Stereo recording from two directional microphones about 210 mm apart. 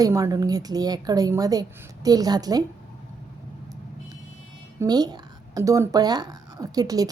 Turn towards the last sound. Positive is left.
turn(degrees=-15)  # may be behind; listen again after turning